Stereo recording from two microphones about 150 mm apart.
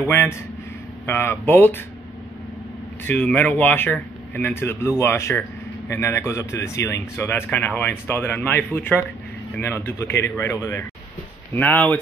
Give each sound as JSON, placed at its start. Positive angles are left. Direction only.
{"t": 0.1, "sound": "speech", "side_deg": 15}
{"t": 3.1, "sound": "speech", "side_deg": 10}